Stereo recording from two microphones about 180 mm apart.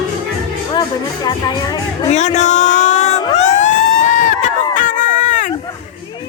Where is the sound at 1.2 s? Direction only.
20° left (ahead or behind).